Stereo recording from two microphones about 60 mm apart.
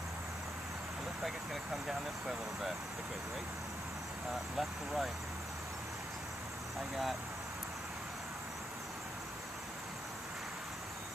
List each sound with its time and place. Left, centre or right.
1.2 s speech: centre
4.6 s speech: centre